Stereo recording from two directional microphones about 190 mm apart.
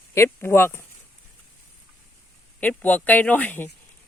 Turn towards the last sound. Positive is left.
turn(degrees=10)  # may be behind; listen again after turning